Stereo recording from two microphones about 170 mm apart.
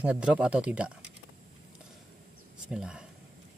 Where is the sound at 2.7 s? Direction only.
5° right (ahead or behind).